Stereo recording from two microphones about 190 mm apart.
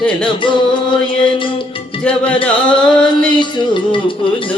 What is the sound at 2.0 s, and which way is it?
Music, 5° left (ahead or behind).